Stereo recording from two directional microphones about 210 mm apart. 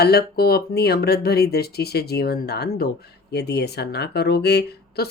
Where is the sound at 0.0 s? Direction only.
50° left (ahead or behind).